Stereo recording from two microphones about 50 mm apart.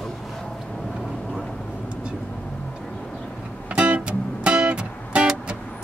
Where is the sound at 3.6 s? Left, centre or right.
Right.